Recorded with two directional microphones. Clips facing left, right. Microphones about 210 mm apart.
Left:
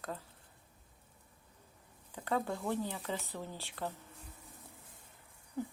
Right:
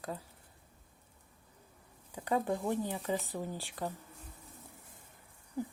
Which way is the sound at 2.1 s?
15° right (ahead or behind).